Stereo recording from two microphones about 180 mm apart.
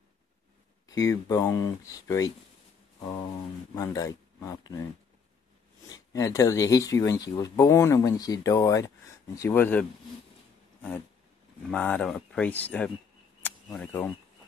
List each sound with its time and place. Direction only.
0.8 s speech: 20° left (ahead or behind)
3.7 s speech: 20° left (ahead or behind)
5.9 s speech: 20° left (ahead or behind)
11.7 s speech: 5° left (ahead or behind)
13.4 s a sound: 5° left (ahead or behind)